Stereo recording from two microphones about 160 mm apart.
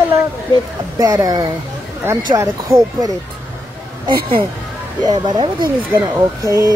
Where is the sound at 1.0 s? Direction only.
20° right (ahead or behind).